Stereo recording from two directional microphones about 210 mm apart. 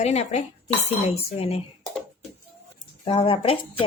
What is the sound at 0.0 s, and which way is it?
Speech, 30° left (ahead or behind).